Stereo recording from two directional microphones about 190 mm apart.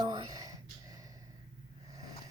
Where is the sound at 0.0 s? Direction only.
20° right (ahead or behind).